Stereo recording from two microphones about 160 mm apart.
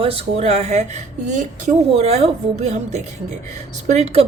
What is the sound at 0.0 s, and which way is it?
A woman's voice, 40° right (ahead or behind).